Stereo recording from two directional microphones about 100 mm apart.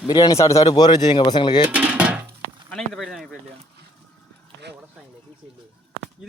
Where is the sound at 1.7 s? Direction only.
15° right (ahead or behind).